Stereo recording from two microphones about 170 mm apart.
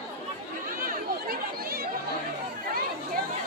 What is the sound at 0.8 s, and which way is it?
Chatter, 60° right (ahead or behind).